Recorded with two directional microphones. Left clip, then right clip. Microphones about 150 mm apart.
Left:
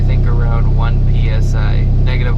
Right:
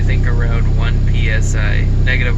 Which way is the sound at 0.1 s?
25° left (ahead or behind).